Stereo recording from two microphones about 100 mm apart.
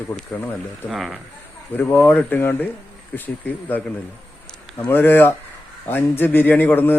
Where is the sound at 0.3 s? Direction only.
20° left (ahead or behind).